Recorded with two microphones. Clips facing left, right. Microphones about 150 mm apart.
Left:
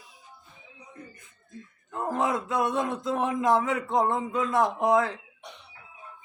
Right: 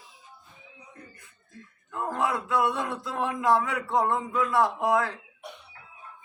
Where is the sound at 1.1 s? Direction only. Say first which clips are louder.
Left 4 dB; 20° left (ahead or behind).